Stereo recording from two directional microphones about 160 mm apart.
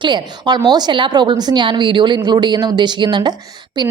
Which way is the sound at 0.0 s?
30° right (ahead or behind).